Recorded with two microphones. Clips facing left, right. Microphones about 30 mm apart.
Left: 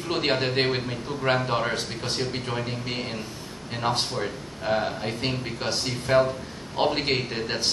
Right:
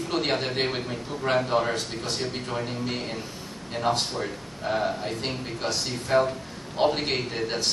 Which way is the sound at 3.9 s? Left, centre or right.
Centre.